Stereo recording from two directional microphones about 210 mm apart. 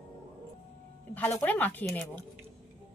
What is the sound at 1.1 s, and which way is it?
Speech, 10° left (ahead or behind).